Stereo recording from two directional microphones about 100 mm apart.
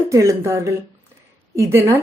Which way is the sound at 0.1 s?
30° right (ahead or behind).